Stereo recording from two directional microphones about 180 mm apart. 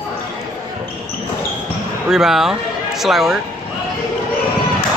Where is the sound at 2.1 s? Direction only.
5° right (ahead or behind).